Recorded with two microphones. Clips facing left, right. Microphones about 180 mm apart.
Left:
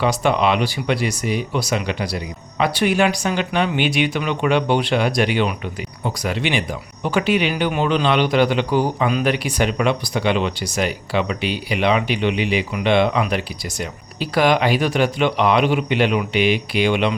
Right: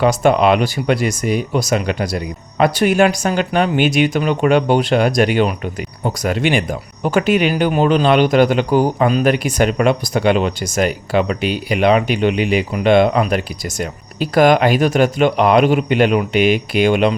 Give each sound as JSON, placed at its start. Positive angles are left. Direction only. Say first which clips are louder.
{"t": 0.0, "sound": "speech", "louder": "right 5 dB", "side_deg": -50}